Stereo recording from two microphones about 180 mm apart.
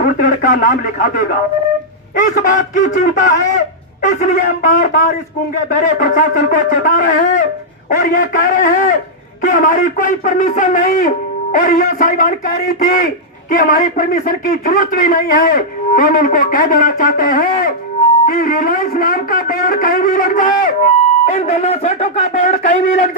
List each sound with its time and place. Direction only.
0.0 s a man's voice: 45° left (ahead or behind)
2.4 s a man's voice: 45° left (ahead or behind)
6.0 s a man's voice: 45° left (ahead or behind)